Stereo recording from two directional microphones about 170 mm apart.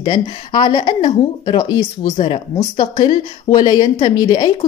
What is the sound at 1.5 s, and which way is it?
Speech, 20° left (ahead or behind).